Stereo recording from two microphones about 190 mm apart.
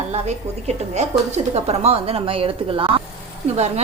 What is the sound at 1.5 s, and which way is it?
A woman's voice, 35° right (ahead or behind).